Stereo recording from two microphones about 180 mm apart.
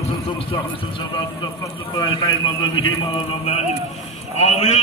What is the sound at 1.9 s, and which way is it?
A man's voice, 25° left (ahead or behind).